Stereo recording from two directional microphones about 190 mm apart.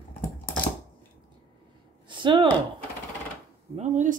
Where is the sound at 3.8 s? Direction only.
40° right (ahead or behind).